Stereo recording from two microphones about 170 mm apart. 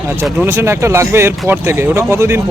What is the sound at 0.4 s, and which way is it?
Speech, 15° right (ahead or behind).